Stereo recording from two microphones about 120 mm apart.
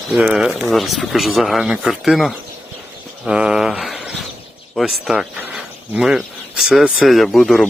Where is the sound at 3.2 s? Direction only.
5° right (ahead or behind).